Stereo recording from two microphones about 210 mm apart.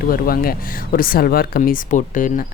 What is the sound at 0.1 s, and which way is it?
Speech, 45° left (ahead or behind).